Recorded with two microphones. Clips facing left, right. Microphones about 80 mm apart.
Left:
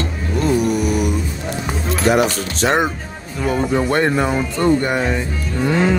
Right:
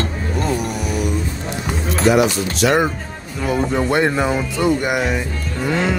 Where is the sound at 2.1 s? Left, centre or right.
Left.